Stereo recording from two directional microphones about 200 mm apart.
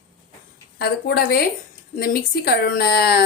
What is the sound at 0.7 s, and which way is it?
A woman's voice, 50° left (ahead or behind).